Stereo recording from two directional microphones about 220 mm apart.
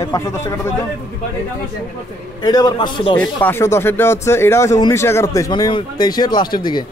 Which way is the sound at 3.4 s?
10° left (ahead or behind).